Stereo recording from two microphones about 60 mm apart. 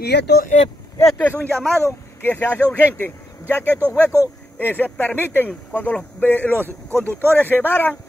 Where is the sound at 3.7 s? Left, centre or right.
Right.